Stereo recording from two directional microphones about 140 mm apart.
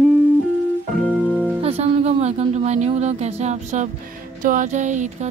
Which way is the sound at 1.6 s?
45° right (ahead or behind).